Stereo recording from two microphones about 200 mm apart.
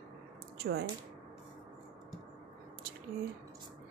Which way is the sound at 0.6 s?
55° right (ahead or behind).